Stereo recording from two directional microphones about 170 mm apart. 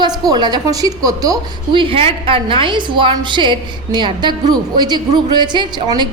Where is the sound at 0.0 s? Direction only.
25° right (ahead or behind).